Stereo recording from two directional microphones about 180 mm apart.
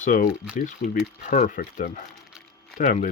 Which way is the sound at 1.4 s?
50° left (ahead or behind).